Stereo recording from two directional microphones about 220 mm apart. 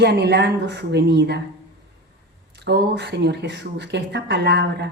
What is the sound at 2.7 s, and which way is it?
A woman's voice, 50° right (ahead or behind).